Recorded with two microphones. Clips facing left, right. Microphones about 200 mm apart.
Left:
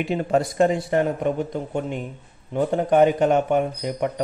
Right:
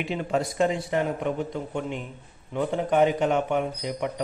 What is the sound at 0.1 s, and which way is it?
Speech, 45° left (ahead or behind).